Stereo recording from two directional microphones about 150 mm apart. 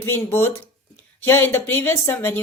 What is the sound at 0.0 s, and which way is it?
A woman's voice, 15° left (ahead or behind).